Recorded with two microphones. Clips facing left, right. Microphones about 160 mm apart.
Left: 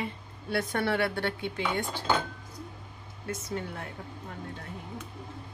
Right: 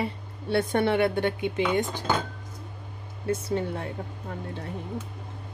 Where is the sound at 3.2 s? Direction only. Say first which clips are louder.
Right 8 dB; 30° right (ahead or behind).